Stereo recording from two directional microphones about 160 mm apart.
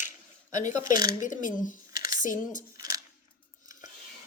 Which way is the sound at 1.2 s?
55° left (ahead or behind).